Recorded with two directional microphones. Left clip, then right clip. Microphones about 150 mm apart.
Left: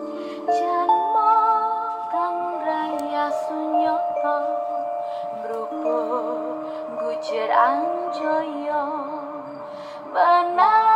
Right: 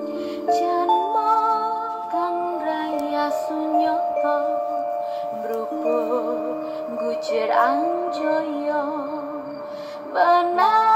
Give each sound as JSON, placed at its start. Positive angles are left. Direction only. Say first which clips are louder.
{"t": 0.5, "sound": "music", "louder": "even", "side_deg": -45}
{"t": 1.1, "sound": "music", "louder": "left 2 dB", "side_deg": -45}
{"t": 5.9, "sound": "music", "louder": "right 1 dB", "side_deg": -40}
{"t": 10.1, "sound": "female singing", "louder": "even", "side_deg": -40}